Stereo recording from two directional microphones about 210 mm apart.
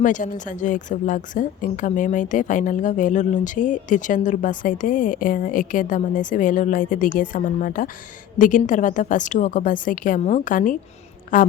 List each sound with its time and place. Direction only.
0.0 s a woman's voice: 35° left (ahead or behind)